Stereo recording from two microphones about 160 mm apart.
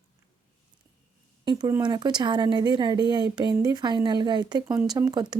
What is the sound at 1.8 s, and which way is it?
A woman's voice, 25° right (ahead or behind).